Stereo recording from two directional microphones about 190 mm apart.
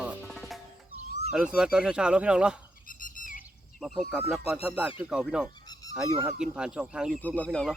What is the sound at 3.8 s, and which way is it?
Speech, centre (ahead or behind).